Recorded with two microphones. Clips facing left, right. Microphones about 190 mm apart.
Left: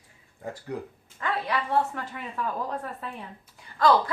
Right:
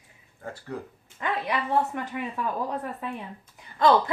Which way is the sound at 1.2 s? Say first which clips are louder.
Even; 15° right (ahead or behind).